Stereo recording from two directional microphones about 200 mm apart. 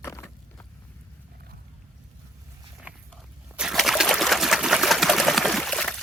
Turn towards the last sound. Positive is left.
turn(degrees=5)  # may be behind; listen again after turning